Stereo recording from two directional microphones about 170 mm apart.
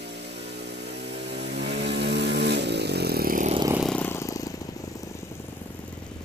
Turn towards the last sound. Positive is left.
turn(degrees=20)  # may be behind; listen again after turning